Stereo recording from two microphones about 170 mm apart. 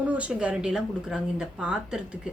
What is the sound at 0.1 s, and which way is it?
A woman's voice, 5° right (ahead or behind).